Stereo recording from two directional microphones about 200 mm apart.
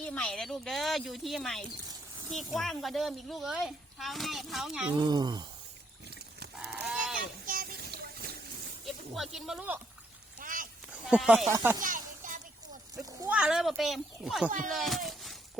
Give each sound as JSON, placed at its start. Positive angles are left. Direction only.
{"t": 0.0, "sound": "a woman's voice", "side_deg": 5}
{"t": 4.9, "sound": "speech", "side_deg": -20}
{"t": 6.6, "sound": "livestock", "side_deg": -5}
{"t": 7.2, "sound": "a sound", "side_deg": -45}
{"t": 8.9, "sound": "speech", "side_deg": 0}
{"t": 10.4, "sound": "a sound", "side_deg": -40}
{"t": 10.9, "sound": "speech", "side_deg": -5}
{"t": 11.8, "sound": "a sound", "side_deg": -40}
{"t": 13.2, "sound": "a woman's voice", "side_deg": -5}